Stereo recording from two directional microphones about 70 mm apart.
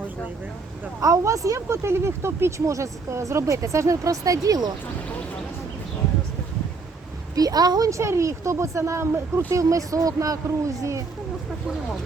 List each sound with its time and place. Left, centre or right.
1.0 s speech: right
7.3 s a woman's voice: right
7.9 s speech: right
9.5 s speech: right